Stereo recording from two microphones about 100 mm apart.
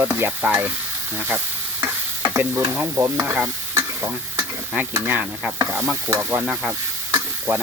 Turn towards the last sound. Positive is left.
turn(degrees=-15)  # may be behind; listen again after turning